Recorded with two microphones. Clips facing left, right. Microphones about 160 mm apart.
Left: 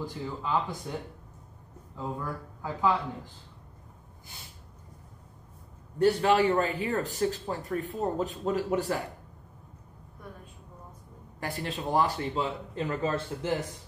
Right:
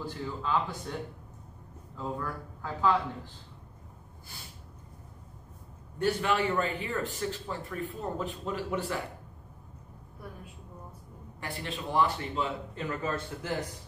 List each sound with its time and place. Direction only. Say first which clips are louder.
0.0 s speech: left 1 dB; 15° left (ahead or behind)
2.0 s speech: even; 15° left (ahead or behind)
5.9 s a man's voice: left 5 dB; 35° left (ahead or behind)
11.3 s a man's voice: left 3 dB; 40° left (ahead or behind)